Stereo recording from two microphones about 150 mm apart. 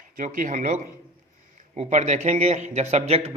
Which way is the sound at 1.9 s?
55° right (ahead or behind).